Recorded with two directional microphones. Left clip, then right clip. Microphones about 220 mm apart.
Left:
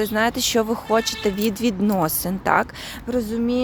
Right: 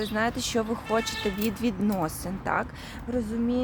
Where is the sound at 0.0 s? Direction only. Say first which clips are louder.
Left 7 dB; 30° left (ahead or behind).